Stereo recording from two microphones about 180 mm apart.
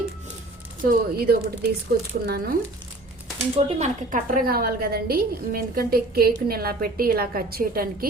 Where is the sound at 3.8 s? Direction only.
45° right (ahead or behind).